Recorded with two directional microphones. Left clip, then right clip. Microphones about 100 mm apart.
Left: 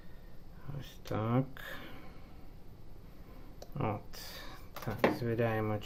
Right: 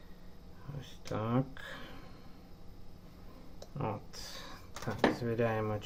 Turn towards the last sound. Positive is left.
turn(degrees=20)  # may be behind; listen again after turning